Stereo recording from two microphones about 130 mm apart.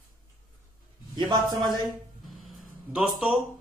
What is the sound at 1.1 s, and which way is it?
Speech, 35° right (ahead or behind).